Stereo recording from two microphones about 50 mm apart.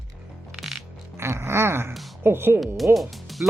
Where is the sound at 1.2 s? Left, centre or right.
Right.